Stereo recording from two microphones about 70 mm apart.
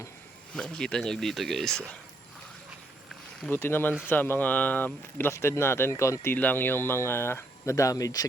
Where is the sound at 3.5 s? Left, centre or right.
Left.